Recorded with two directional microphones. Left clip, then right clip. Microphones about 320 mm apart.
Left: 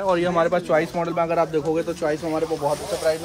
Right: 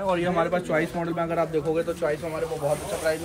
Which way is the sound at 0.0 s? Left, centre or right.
Left.